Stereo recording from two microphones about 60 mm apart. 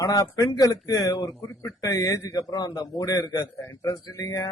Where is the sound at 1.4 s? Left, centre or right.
Left.